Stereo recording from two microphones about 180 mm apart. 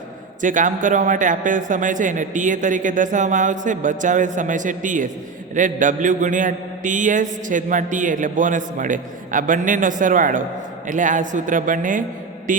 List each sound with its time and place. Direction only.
0.4 s a man's voice: 45° right (ahead or behind)